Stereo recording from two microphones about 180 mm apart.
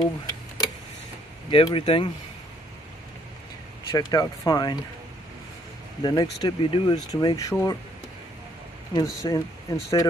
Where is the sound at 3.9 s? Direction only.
20° left (ahead or behind).